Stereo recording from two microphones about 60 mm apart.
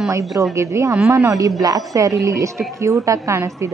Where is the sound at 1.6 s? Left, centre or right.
Right.